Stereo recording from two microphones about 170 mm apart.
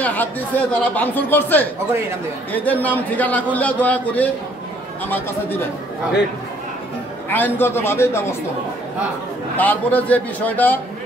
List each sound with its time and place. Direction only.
0.0 s speech: 10° left (ahead or behind)
1.9 s a man's voice: 15° right (ahead or behind)
2.5 s speech: 10° left (ahead or behind)
7.2 s speech: 10° left (ahead or behind)
9.6 s speech: 10° left (ahead or behind)